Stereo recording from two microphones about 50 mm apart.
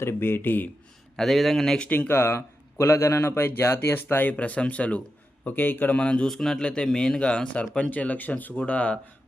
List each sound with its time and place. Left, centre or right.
0.0 s speech: left
1.1 s speech: centre
1.9 s speech: left
2.7 s a man's voice: left
3.9 s speech: left
4.4 s speech: left
5.5 s speech: left
6.0 s speech: left
6.2 s a man's voice: centre; by 9.0 s left